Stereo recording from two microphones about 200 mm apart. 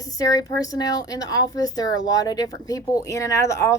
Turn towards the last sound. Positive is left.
turn(degrees=15)  # may be behind; listen again after turning